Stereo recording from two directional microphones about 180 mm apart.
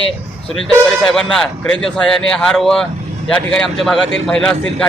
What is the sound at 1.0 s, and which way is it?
Speech, 5° left (ahead or behind).